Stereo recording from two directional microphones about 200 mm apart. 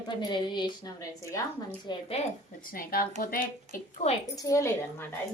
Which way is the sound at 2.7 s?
45° left (ahead or behind).